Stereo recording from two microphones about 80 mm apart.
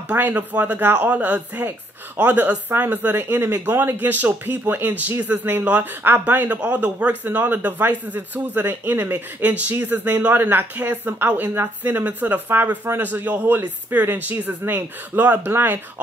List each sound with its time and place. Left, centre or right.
0.1 s speech: right